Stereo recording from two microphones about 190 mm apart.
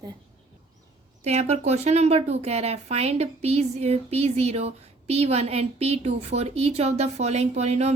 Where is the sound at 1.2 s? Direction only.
35° right (ahead or behind).